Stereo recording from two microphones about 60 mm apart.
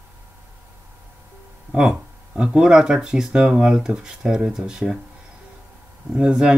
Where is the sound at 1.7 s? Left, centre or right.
Centre.